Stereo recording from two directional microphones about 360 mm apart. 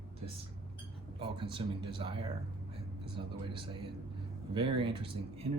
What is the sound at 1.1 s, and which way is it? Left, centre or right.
Speech, centre.